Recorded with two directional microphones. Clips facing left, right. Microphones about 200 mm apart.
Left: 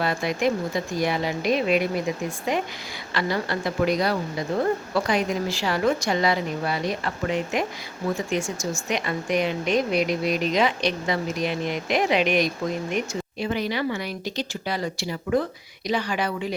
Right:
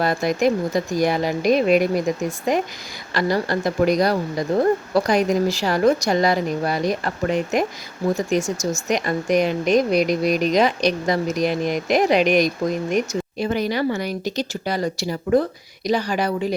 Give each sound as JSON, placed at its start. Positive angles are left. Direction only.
{"t": 0.0, "sound": "speech", "side_deg": -40}